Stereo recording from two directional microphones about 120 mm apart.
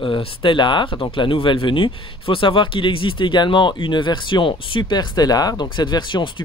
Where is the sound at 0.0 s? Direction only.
45° left (ahead or behind).